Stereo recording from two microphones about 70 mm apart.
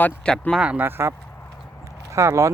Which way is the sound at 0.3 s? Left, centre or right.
Centre.